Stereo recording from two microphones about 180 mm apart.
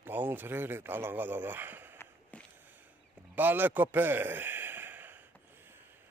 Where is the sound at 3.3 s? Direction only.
10° right (ahead or behind).